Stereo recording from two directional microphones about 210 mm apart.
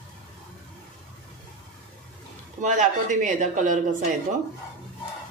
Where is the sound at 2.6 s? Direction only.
35° right (ahead or behind).